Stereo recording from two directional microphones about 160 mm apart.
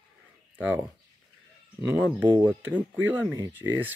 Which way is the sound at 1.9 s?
10° right (ahead or behind).